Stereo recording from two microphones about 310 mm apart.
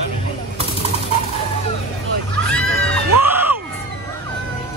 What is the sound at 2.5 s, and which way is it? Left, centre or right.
Music, centre.